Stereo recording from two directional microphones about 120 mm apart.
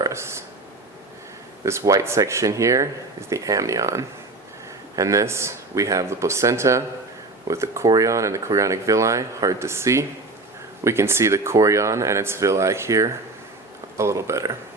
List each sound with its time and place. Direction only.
0.0 s speech: 25° right (ahead or behind)
1.6 s speech: 25° right (ahead or behind)